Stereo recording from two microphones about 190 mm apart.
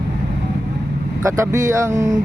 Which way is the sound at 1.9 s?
40° right (ahead or behind).